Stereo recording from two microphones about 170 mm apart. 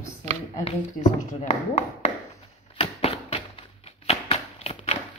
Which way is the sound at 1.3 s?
40° left (ahead or behind).